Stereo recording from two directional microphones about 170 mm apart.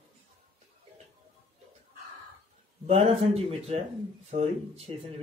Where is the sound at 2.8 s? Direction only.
35° right (ahead or behind).